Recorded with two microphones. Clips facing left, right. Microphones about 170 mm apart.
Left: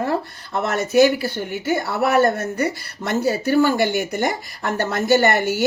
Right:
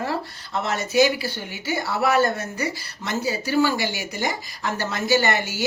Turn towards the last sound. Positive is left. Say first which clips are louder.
# left 5 dB
turn(degrees=60)  # may be behind; listen again after turning